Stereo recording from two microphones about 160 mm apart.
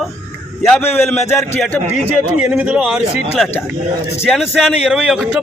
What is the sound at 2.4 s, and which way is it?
A man's voice, 5° right (ahead or behind).